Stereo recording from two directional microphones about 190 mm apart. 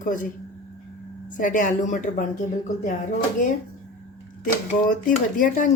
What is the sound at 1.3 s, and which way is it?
Speech, 45° left (ahead or behind).